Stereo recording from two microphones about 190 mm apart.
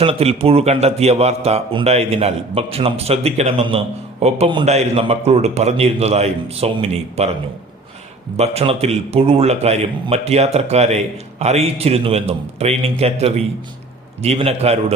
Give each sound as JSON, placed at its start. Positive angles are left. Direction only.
{"t": 0.0, "sound": "a man's voice", "side_deg": -30}
{"t": 8.4, "sound": "a man's voice", "side_deg": -35}